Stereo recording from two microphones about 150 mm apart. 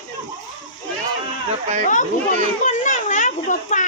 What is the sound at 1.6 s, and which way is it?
Speech, 50° right (ahead or behind).